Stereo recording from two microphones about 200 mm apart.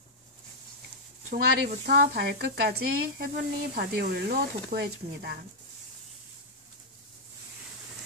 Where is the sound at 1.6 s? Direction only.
50° right (ahead or behind).